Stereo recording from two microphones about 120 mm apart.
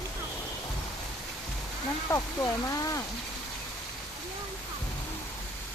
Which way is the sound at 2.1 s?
25° left (ahead or behind).